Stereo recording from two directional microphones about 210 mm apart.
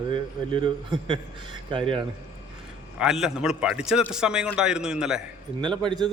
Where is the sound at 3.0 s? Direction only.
Centre (ahead or behind).